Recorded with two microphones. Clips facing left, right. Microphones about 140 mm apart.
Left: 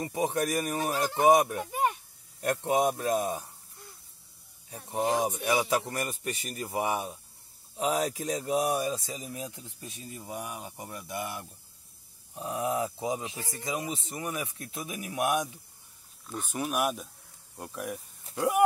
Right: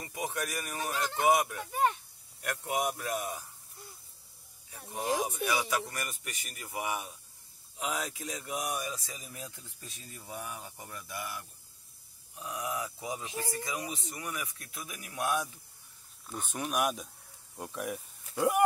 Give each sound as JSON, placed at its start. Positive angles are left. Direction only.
{"t": 0.0, "sound": "speech", "side_deg": 30}
{"t": 1.6, "sound": "speech", "side_deg": 15}
{"t": 2.4, "sound": "speech", "side_deg": 30}
{"t": 4.9, "sound": "speech", "side_deg": 35}
{"t": 16.4, "sound": "speech", "side_deg": 5}